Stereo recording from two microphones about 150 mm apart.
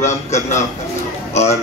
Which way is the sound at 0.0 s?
55° left (ahead or behind).